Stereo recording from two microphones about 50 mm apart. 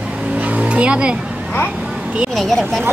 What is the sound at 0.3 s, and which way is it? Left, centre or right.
Vehicle, right.